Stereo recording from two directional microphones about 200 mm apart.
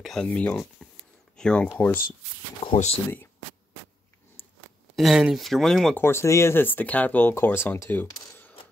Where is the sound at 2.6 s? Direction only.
30° left (ahead or behind).